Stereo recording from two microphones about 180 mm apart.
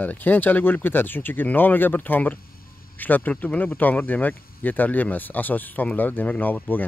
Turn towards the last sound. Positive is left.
turn(degrees=10)  # may be behind; listen again after turning